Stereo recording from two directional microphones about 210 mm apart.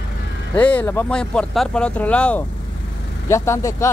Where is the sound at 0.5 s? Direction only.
5° left (ahead or behind).